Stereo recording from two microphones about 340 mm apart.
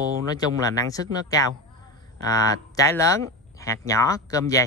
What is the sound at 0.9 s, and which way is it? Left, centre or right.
Speech, centre.